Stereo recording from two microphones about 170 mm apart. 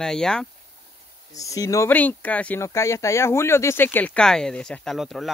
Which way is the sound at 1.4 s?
20° left (ahead or behind).